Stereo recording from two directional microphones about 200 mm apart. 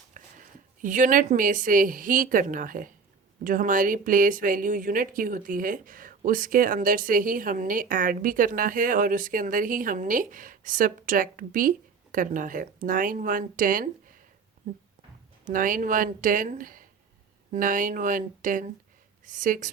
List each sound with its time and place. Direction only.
0.1 s a woman's voice: 40° right (ahead or behind)
15.5 s a woman's voice: 40° right (ahead or behind)